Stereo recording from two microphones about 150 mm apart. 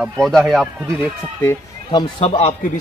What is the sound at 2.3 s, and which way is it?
Speech, 45° left (ahead or behind).